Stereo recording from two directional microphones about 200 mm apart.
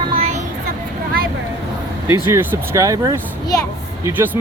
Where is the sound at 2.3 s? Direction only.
15° right (ahead or behind).